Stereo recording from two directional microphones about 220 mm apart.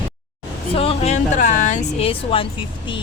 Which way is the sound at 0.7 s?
25° left (ahead or behind).